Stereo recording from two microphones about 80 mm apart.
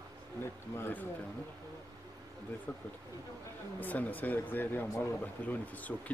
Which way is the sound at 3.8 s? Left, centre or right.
Left.